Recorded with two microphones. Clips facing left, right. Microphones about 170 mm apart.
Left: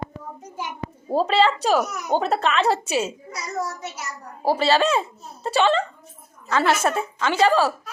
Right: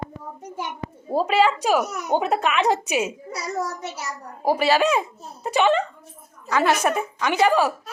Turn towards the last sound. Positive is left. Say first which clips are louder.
# even
turn(degrees=-15)  # may be behind; listen again after turning